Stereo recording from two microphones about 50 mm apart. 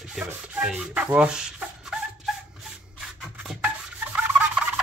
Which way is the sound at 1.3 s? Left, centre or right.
Centre.